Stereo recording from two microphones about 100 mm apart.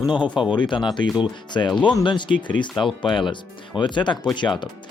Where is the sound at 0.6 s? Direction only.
50° left (ahead or behind).